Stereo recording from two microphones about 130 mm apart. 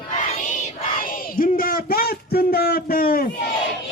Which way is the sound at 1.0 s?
90° left.